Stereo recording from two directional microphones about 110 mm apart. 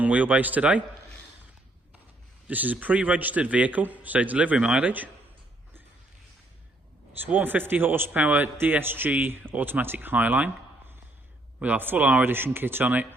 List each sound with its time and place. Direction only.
0.0 s a man's voice: 15° right (ahead or behind)
2.5 s a man's voice: 15° right (ahead or behind)
7.3 s a man's voice: 15° right (ahead or behind)
11.6 s a man's voice: 15° right (ahead or behind)